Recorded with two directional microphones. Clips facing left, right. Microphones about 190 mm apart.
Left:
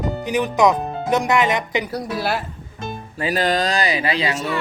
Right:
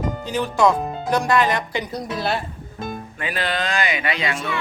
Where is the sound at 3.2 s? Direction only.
40° left (ahead or behind).